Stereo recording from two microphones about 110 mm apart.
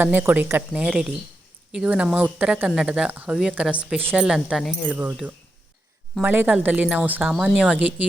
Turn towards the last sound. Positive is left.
turn(degrees=-10)  # may be behind; listen again after turning